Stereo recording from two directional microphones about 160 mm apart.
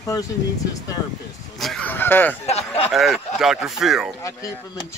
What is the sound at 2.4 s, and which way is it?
Speech, 40° left (ahead or behind).